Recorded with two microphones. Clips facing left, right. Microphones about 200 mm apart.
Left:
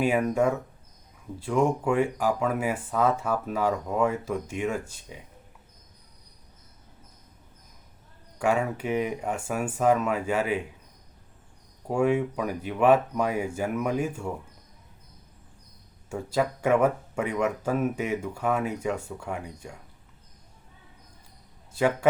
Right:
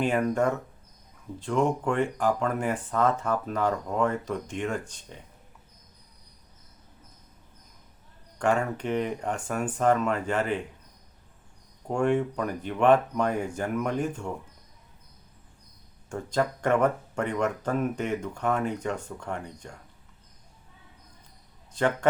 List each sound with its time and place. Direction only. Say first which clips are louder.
0.0 s speech: left 1 dB; 5° left (ahead or behind)
8.4 s speech: even; 5° left (ahead or behind)
11.9 s speech: left 1 dB; 5° left (ahead or behind)
16.0 s speech: left 1 dB; 5° left (ahead or behind)
21.7 s a man's voice: left 2 dB; 10° left (ahead or behind)